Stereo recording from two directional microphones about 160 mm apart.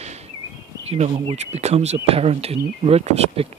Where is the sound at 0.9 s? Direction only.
40° right (ahead or behind).